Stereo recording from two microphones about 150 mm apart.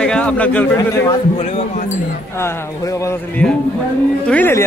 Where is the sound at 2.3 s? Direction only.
20° left (ahead or behind).